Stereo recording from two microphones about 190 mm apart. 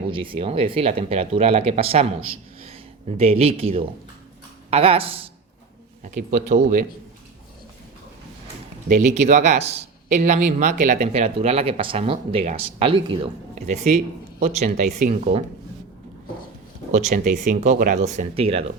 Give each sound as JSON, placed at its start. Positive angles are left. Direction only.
{"t": 0.1, "sound": "speech", "side_deg": -25}
{"t": 6.0, "sound": "speech", "side_deg": -45}
{"t": 8.9, "sound": "speech", "side_deg": -40}
{"t": 13.7, "sound": "speech", "side_deg": -40}
{"t": 16.9, "sound": "speech", "side_deg": -40}